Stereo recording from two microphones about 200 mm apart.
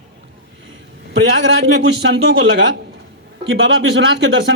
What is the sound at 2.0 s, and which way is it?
Speech, 75° right (ahead or behind).